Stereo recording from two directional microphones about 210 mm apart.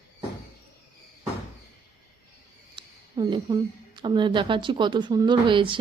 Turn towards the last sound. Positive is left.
turn(degrees=-25)  # may be behind; listen again after turning